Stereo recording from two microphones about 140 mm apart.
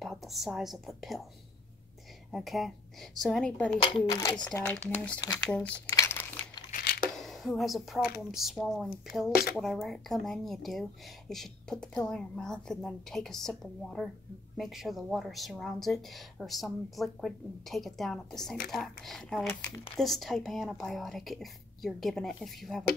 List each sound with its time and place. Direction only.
0.0 s a woman's voice: centre (ahead or behind)
2.3 s speech: centre (ahead or behind)
4.1 s speech: 25° left (ahead or behind)
4.8 s speech: 10° left (ahead or behind)
5.9 s crumpling: 20° left (ahead or behind)
6.7 s a sound: 90° left
7.2 s speech: centre (ahead or behind)
9.3 s speech: 90° left
9.6 s speech: centre (ahead or behind)